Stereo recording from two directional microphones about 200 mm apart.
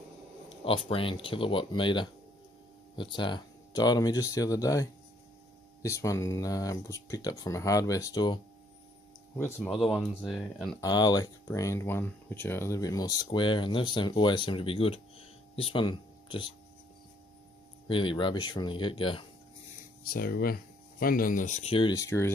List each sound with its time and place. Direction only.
0.6 s speech: 25° left (ahead or behind)
9.6 s speech: centre (ahead or behind)
10.8 s speech: 20° left (ahead or behind)
17.8 s speech: 25° left (ahead or behind)
20.1 s speech: 50° left (ahead or behind); by 22.3 s 15° left (ahead or behind)